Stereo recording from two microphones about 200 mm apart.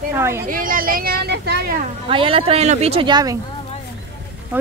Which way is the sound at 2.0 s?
25° right (ahead or behind).